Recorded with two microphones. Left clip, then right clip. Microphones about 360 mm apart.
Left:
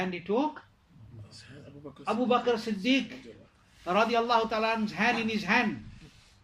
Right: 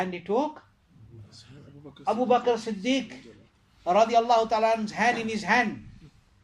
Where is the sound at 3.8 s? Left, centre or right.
Centre.